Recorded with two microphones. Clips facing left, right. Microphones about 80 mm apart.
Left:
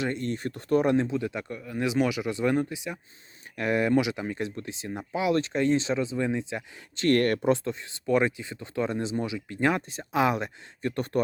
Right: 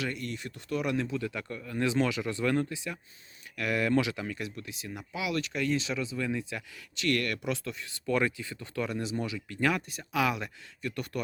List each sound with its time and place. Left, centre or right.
0.0 s speech: left